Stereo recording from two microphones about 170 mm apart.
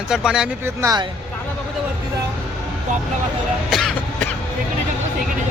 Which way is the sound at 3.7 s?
Centre (ahead or behind).